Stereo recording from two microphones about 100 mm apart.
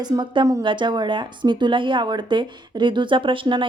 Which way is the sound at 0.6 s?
55° right (ahead or behind).